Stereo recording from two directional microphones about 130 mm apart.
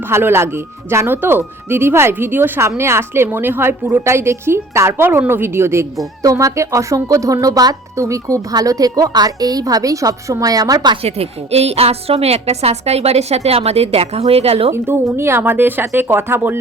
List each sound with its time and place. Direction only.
0.1 s speech: 20° right (ahead or behind)
11.0 s a woman's voice: 50° right (ahead or behind)
14.7 s speech: 20° right (ahead or behind)